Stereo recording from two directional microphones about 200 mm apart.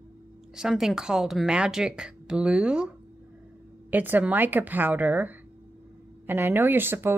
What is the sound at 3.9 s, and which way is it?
Speech, 10° right (ahead or behind).